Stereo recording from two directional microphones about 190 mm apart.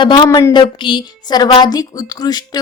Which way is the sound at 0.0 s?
25° left (ahead or behind).